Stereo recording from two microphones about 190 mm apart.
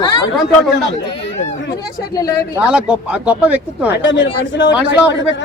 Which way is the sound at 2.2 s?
20° left (ahead or behind).